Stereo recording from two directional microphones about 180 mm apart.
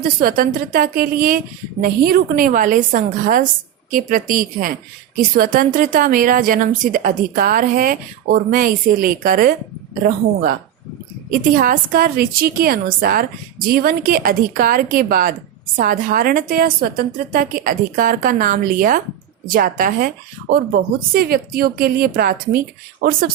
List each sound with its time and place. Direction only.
0.2 s a woman's voice: 50° right (ahead or behind)
11.3 s a woman's voice: 50° right (ahead or behind)